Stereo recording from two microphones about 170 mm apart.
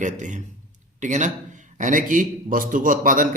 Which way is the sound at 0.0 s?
45° right (ahead or behind).